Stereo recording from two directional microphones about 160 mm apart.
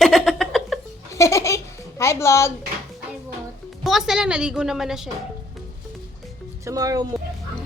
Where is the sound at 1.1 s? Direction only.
20° left (ahead or behind).